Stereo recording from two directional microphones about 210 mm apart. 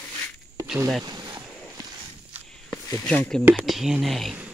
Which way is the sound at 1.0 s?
20° right (ahead or behind).